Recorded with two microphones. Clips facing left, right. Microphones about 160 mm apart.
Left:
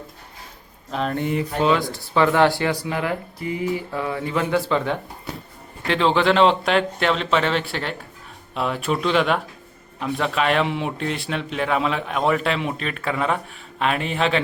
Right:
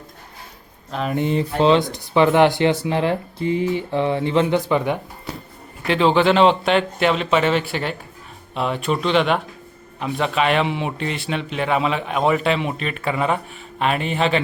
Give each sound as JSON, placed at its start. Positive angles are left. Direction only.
{"t": 0.9, "sound": "speech", "side_deg": 0}
{"t": 1.1, "sound": "speech", "side_deg": -25}
{"t": 5.9, "sound": "a man's voice", "side_deg": -5}